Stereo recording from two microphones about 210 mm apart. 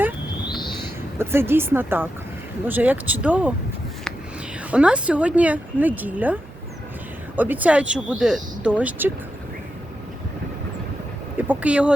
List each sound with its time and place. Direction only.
0.4 s bird: 20° left (ahead or behind)
1.2 s speech: 10° right (ahead or behind)
4.7 s speech: 5° right (ahead or behind)
11.3 s speech: 5° right (ahead or behind)